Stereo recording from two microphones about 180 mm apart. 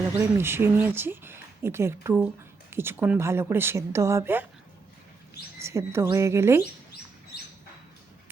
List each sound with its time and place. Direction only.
0.2 s speech: 10° right (ahead or behind)
5.5 s speech: 15° right (ahead or behind)